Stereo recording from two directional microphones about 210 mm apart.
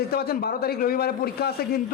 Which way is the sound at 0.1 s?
45° left (ahead or behind).